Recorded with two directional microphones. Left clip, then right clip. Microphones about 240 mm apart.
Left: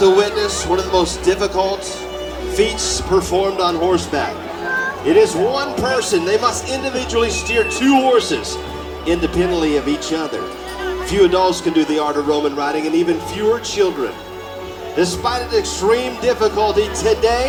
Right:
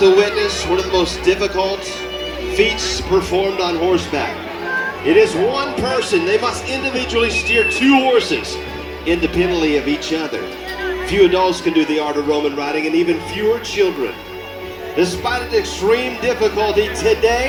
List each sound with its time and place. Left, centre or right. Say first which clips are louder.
0.0 s speech: right 1 dB; left
14.9 s speech: even; left